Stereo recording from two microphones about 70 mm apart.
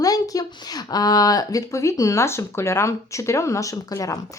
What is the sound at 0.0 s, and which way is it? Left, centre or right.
A woman's voice, left.